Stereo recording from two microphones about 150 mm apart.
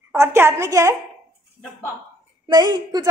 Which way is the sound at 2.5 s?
30° right (ahead or behind).